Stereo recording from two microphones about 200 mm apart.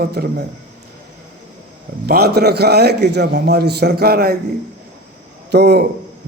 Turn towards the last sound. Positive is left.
turn(degrees=-55)  # may be behind; listen again after turning